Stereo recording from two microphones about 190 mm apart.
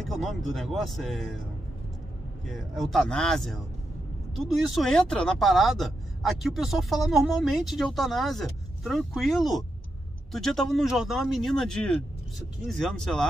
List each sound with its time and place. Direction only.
0.0 s speech: centre (ahead or behind)
2.4 s speech: centre (ahead or behind)
4.6 s speech: centre (ahead or behind)